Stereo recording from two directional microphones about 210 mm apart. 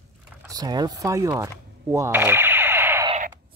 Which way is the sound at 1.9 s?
10° right (ahead or behind).